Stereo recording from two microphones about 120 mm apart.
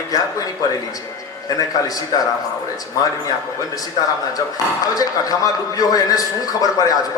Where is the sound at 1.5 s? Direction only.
30° left (ahead or behind).